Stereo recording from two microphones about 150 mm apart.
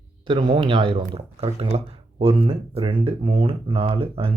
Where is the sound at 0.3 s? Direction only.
30° right (ahead or behind).